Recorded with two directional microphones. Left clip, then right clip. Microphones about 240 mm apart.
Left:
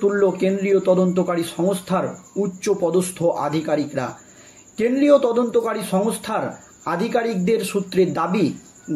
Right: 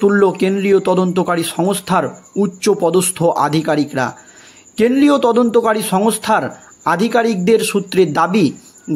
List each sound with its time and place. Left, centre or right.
0.0 s a man's voice: right